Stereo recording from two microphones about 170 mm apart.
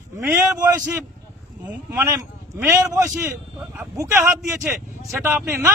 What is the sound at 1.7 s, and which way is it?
Speech, 10° right (ahead or behind).